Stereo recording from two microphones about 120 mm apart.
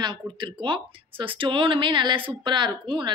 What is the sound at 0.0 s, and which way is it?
A woman's voice, 40° right (ahead or behind).